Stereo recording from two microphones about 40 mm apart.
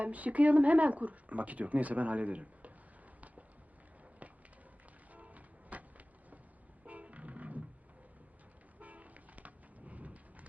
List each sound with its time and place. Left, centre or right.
0.0 s speech: right
4.2 s a sound: right
5.1 s music: right
6.8 s music: right
8.8 s vehicle: right